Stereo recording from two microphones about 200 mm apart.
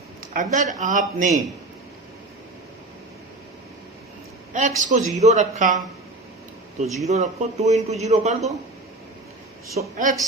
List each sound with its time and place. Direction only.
0.3 s a man's voice: 40° right (ahead or behind)
4.8 s a man's voice: 35° right (ahead or behind)
6.8 s speech: centre (ahead or behind)
7.1 s a man's voice: 35° right (ahead or behind)
9.7 s a man's voice: 40° right (ahead or behind)